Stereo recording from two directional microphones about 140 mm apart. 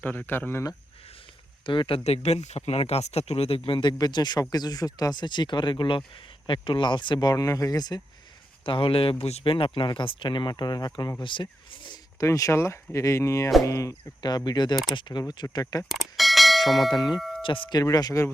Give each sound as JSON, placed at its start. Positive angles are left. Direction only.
{"t": 0.0, "sound": "speech", "side_deg": 10}
{"t": 1.6, "sound": "speech", "side_deg": 35}
{"t": 3.7, "sound": "speech", "side_deg": 35}
{"t": 8.6, "sound": "speech", "side_deg": 40}
{"t": 12.2, "sound": "speech", "side_deg": 20}
{"t": 15.8, "sound": "bell", "side_deg": 0}
{"t": 16.9, "sound": "speech", "side_deg": 30}
{"t": 17.2, "sound": "tubular bells", "side_deg": 0}
{"t": 17.4, "sound": "speech", "side_deg": 40}